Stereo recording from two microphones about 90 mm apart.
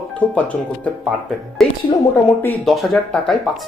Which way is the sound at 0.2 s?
15° left (ahead or behind).